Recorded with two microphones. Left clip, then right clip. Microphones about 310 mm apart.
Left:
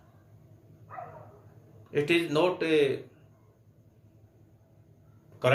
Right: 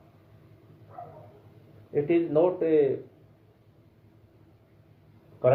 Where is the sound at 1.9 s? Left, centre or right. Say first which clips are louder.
Right 2 dB; left.